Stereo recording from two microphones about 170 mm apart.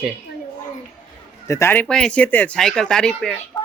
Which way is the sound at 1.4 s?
15° left (ahead or behind).